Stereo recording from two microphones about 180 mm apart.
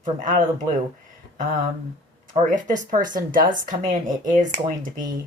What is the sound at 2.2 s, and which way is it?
Speech, 45° right (ahead or behind).